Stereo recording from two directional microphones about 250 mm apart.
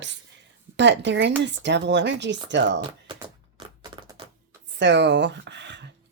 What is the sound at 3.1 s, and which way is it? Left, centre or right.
Typewriter, centre.